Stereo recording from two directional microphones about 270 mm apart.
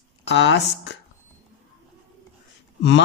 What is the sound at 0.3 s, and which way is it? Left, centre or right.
Speech, left.